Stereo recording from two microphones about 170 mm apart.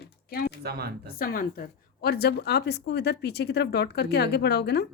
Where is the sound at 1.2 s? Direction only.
60° left (ahead or behind).